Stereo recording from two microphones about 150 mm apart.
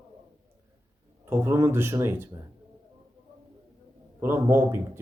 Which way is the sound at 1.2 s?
15° right (ahead or behind).